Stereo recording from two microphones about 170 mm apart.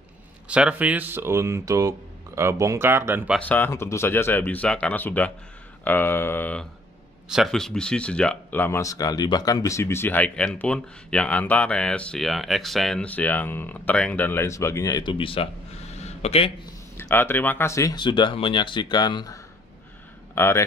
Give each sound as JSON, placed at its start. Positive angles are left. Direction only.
{"t": 0.5, "sound": "speech", "side_deg": -5}
{"t": 3.3, "sound": "speech", "side_deg": 10}
{"t": 7.2, "sound": "speech", "side_deg": 0}
{"t": 15.9, "sound": "a sound", "side_deg": 40}
{"t": 16.9, "sound": "speech", "side_deg": 10}